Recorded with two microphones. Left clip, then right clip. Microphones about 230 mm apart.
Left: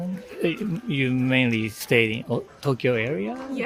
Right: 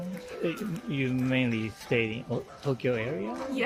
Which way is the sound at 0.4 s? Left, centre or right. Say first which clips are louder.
Left 7 dB; left.